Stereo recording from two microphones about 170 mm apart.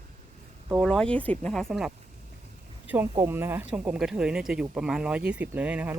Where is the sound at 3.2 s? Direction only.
15° right (ahead or behind).